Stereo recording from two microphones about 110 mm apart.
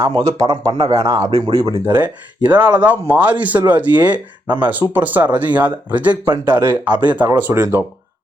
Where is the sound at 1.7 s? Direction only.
20° right (ahead or behind).